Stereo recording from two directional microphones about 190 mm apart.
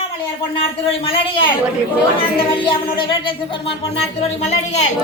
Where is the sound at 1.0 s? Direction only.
25° left (ahead or behind).